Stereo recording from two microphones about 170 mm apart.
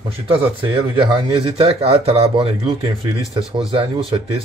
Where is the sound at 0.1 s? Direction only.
30° right (ahead or behind).